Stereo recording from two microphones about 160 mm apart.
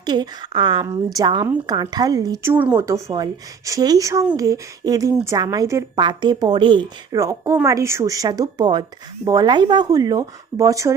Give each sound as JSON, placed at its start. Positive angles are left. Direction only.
{"t": 0.0, "sound": "a woman's voice", "side_deg": -25}